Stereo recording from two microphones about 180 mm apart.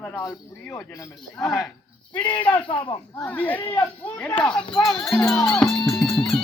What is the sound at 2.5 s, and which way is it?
Speech, 30° left (ahead or behind).